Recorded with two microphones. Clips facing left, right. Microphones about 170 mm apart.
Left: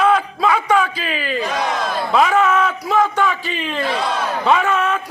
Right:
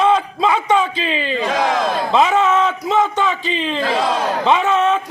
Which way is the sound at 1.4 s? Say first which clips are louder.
Right 6 dB; 90° right.